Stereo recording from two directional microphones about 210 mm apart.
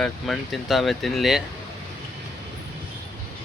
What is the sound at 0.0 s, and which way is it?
Speech, centre (ahead or behind).